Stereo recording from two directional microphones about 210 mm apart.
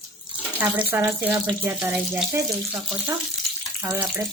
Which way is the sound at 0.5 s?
10° right (ahead or behind).